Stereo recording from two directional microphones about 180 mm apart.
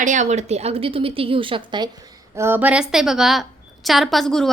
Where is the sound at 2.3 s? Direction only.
15° right (ahead or behind).